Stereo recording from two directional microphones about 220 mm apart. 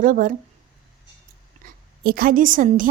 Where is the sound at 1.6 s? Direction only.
40° right (ahead or behind).